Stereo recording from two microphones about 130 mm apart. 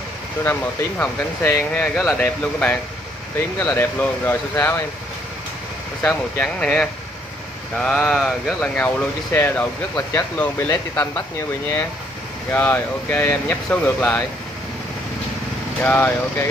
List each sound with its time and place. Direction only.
0.4 s speech: 15° left (ahead or behind)
2.0 s speech: centre (ahead or behind); by 4.8 s 20° left (ahead or behind)
6.0 s speech: 10° left (ahead or behind)
12.4 s speech: 15° left (ahead or behind)
15.8 s speech: 15° left (ahead or behind)